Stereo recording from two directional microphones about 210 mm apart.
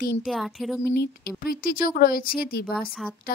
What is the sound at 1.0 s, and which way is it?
Speech, 45° left (ahead or behind).